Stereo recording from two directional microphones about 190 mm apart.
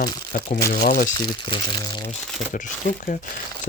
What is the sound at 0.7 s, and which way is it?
Speech, 50° left (ahead or behind).